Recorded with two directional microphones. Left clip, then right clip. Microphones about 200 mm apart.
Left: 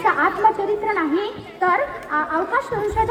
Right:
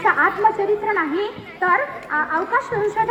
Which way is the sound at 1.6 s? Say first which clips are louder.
Even; 40° left (ahead or behind).